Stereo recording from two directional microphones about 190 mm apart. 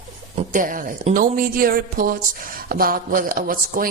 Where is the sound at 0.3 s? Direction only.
45° right (ahead or behind).